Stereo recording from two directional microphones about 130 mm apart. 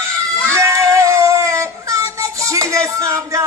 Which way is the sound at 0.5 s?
25° right (ahead or behind).